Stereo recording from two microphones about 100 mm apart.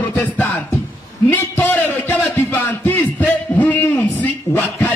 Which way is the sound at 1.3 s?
20° left (ahead or behind).